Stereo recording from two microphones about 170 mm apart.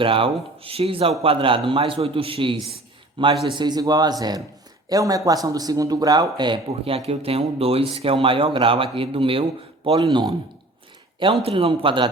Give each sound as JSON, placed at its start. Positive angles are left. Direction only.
{"t": 0.0, "sound": "a man's voice", "side_deg": -30}